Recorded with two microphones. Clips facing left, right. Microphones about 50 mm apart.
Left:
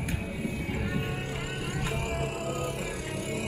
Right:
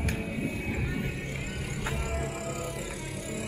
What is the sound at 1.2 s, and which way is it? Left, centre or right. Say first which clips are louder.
Vehicle: left 2 dB; left.